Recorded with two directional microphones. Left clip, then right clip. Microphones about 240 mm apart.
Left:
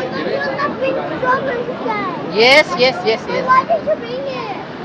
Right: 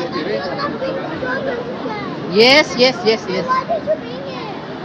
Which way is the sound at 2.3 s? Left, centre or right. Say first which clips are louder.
Even; right.